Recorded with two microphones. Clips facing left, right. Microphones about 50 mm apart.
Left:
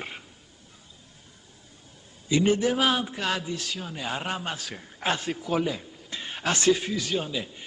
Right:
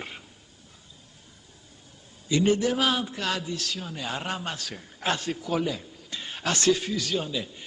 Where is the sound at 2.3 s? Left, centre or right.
Centre.